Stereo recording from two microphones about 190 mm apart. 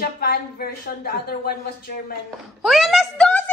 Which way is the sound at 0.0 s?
55° left (ahead or behind).